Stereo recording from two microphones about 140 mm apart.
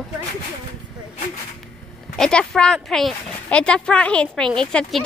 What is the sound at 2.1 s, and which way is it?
Speech, 5° left (ahead or behind).